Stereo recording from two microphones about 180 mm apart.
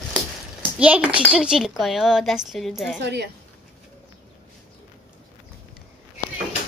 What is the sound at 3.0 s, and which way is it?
Speech, 70° right (ahead or behind).